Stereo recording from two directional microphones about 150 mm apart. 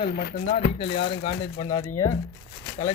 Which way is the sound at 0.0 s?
90° left.